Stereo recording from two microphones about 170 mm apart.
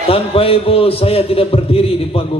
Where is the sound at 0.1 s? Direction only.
35° left (ahead or behind).